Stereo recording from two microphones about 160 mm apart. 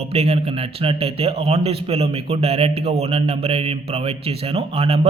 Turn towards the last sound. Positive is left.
turn(degrees=-40)  # may be behind; listen again after turning